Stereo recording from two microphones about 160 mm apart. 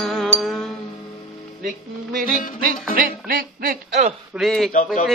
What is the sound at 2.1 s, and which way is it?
Music, 60° right (ahead or behind).